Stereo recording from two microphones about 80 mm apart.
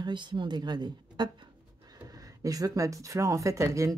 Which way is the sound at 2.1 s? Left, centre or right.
Right.